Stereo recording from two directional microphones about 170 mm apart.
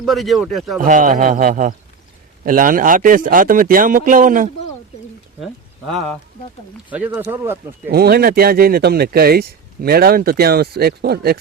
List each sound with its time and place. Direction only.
0.0 s speech: centre (ahead or behind)
0.8 s speech: 50° right (ahead or behind)
5.4 s speech: centre (ahead or behind)
6.9 s speech: 10° right (ahead or behind)
7.9 s speech: 70° right (ahead or behind)